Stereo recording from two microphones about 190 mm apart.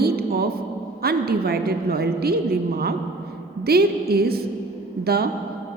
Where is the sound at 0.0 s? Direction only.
55° right (ahead or behind).